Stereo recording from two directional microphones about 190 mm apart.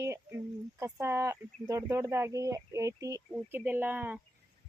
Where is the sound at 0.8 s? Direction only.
15° right (ahead or behind).